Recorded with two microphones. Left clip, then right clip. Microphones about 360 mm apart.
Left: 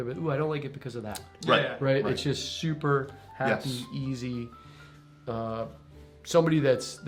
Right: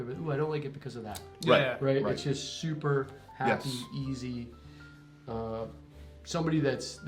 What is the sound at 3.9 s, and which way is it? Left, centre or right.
Speech, left.